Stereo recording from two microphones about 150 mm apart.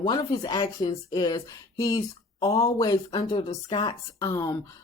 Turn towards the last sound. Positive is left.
turn(degrees=20)  # may be behind; listen again after turning